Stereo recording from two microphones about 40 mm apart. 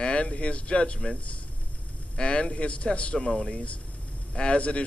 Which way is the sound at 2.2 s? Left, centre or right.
Left.